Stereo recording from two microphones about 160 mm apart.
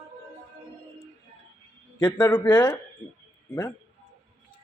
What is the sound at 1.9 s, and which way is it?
Speech, 15° left (ahead or behind).